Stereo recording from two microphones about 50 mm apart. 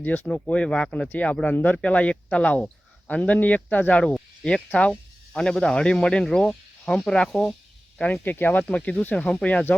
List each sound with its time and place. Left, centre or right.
0.0 s speech: left
0.4 s speech: left
1.2 s speech: left
4.0 s speech: centre
5.3 s speech: centre
7.9 s speech: left